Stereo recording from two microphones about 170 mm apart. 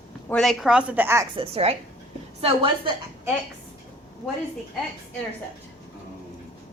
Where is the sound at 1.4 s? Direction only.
35° right (ahead or behind).